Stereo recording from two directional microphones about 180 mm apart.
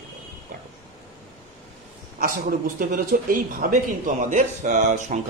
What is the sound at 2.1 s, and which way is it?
A man's voice, 50° right (ahead or behind).